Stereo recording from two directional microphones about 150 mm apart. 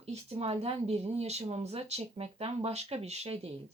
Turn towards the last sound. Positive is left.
turn(degrees=-45)  # may be behind; listen again after turning